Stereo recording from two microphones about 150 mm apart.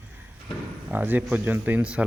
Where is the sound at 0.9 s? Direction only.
10° right (ahead or behind).